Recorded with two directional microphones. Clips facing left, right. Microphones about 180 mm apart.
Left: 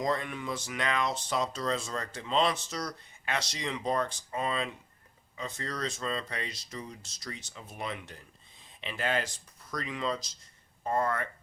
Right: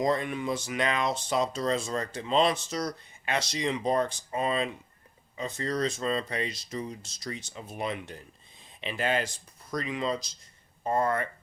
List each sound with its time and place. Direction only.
0.0 s speech: 20° right (ahead or behind)